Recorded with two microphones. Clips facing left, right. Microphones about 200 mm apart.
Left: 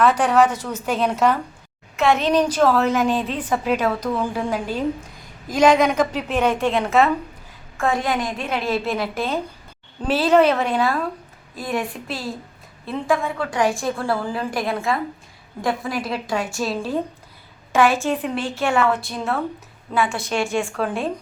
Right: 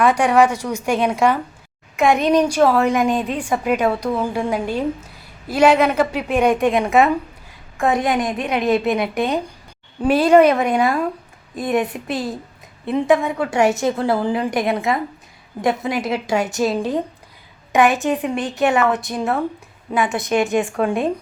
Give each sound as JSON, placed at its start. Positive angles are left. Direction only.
{"t": 0.0, "sound": "a woman's voice", "side_deg": -10}